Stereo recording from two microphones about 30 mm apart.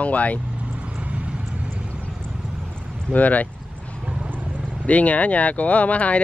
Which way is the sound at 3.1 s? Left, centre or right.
Left.